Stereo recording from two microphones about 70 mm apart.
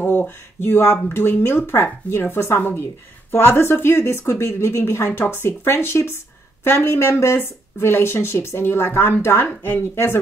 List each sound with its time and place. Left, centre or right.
0.0 s speech: left
5.2 s speech: left